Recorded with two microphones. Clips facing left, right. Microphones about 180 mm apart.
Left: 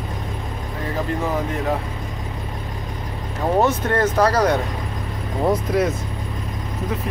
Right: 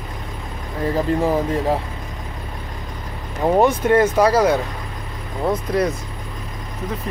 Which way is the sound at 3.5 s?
10° right (ahead or behind).